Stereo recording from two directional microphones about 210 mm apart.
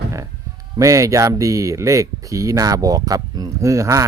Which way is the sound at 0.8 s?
15° right (ahead or behind).